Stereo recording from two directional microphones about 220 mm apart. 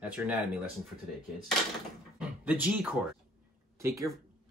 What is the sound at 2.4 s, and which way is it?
Speech, 5° right (ahead or behind).